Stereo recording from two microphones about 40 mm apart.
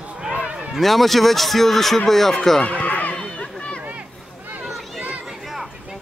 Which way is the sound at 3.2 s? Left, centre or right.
Left.